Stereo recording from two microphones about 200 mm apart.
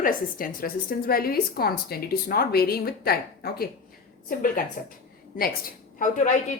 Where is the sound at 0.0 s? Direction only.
45° left (ahead or behind).